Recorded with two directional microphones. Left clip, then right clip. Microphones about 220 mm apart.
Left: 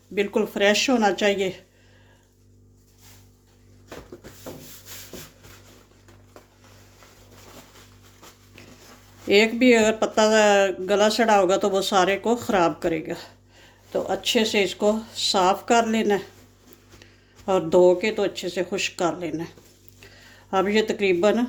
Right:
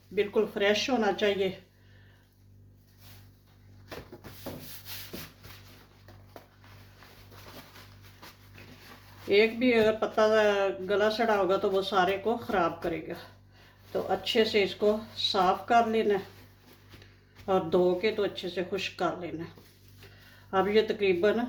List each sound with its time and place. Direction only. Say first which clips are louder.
0.1 s speech: left 4 dB; 45° left (ahead or behind)
9.3 s speech: left 6 dB; 50° left (ahead or behind)
17.4 s speech: left 8 dB; 45° left (ahead or behind)